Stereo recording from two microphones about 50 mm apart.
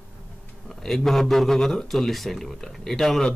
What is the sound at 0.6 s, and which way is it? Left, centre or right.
A man's voice, centre.